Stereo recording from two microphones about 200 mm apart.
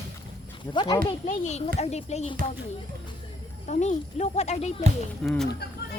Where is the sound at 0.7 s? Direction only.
20° left (ahead or behind).